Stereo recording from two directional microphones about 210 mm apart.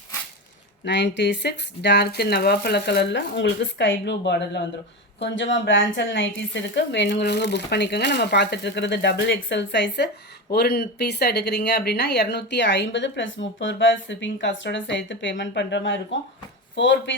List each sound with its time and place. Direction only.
0.9 s speech: 55° left (ahead or behind)